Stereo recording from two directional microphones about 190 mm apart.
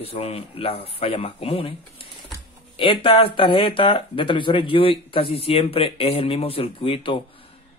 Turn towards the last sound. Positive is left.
turn(degrees=25)  # may be behind; listen again after turning